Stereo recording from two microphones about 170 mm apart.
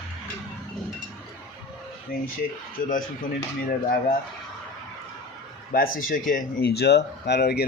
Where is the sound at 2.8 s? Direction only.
55° left (ahead or behind).